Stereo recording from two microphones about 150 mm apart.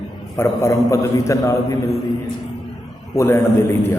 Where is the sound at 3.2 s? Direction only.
15° left (ahead or behind).